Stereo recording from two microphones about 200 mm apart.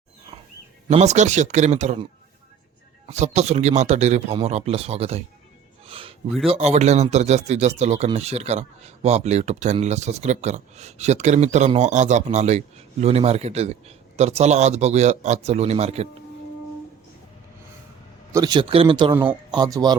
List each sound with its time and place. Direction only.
0.9 s speech: 35° right (ahead or behind)
3.1 s speech: 35° right (ahead or behind)
5.8 s a sound: 30° right (ahead or behind)
6.5 s speech: 35° right (ahead or behind)
18.3 s speech: 20° right (ahead or behind)